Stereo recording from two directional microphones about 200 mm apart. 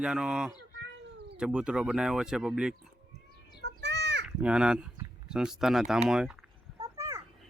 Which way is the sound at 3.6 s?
60° right (ahead or behind).